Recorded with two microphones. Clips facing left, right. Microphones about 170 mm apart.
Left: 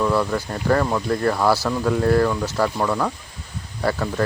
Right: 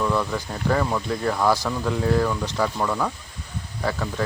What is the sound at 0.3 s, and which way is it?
Speech, centre (ahead or behind).